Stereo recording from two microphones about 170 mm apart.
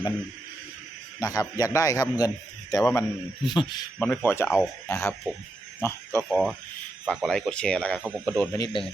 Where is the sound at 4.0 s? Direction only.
10° left (ahead or behind).